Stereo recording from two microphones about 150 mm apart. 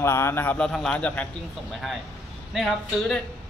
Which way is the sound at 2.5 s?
Centre (ahead or behind).